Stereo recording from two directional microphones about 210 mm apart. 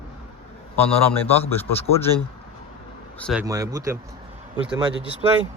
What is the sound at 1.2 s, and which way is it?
Speech, 10° left (ahead or behind).